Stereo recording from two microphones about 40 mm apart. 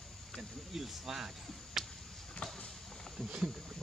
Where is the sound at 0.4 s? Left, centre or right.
Centre.